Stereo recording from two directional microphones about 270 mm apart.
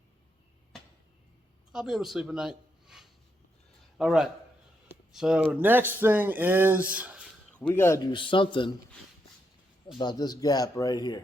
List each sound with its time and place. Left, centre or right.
1.7 s a man's voice: centre
7.7 s speech: centre
10.0 s speech: centre